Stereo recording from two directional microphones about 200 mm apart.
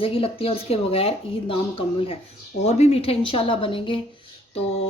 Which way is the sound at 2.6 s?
30° left (ahead or behind).